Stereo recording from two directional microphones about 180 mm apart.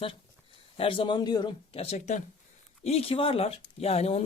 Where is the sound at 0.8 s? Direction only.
30° left (ahead or behind).